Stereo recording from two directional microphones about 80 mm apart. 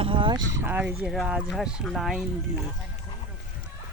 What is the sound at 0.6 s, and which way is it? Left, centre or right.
Speech, right.